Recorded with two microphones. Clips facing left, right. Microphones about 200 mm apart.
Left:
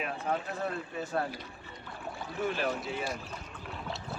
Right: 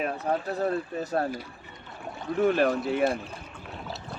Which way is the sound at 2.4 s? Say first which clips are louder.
Right 9 dB; 55° right (ahead or behind).